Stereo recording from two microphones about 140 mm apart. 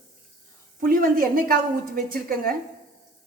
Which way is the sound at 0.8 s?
90° right.